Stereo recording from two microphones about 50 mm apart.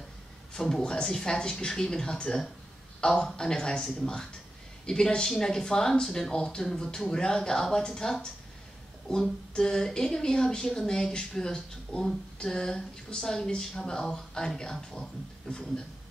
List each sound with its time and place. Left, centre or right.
0.5 s a man's voice: centre
9.5 s speech: centre